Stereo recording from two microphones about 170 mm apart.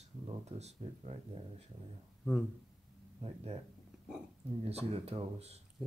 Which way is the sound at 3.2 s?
35° right (ahead or behind).